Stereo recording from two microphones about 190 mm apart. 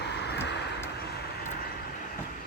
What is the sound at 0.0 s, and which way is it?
Vehicle, 60° left (ahead or behind).